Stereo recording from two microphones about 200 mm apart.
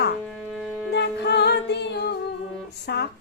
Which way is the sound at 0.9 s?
55° left (ahead or behind).